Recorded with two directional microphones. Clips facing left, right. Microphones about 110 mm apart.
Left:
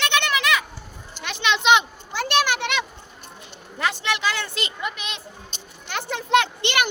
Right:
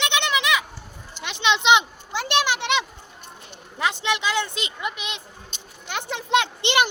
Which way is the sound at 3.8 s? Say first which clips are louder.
Even; 20° right (ahead or behind).